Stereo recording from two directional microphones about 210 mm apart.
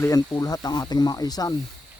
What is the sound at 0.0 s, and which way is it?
Speech, 20° left (ahead or behind).